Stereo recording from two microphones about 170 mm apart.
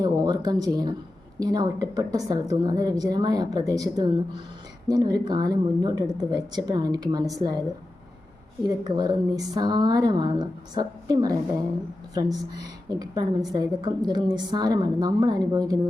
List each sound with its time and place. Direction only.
0.0 s a woman's voice: 25° right (ahead or behind)
8.6 s a woman's voice: 25° right (ahead or behind)